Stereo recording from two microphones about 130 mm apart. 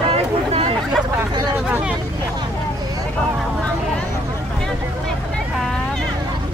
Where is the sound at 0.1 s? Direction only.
50° right (ahead or behind).